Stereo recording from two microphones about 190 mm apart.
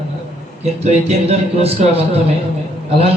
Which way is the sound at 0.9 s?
35° right (ahead or behind).